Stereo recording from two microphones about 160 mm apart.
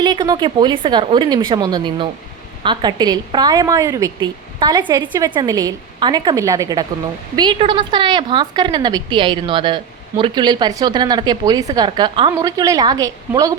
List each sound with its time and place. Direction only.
0.0 s a woman's voice: 25° right (ahead or behind)